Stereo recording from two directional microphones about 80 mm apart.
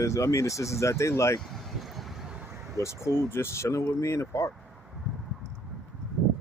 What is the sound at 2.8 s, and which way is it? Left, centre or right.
Speech, left.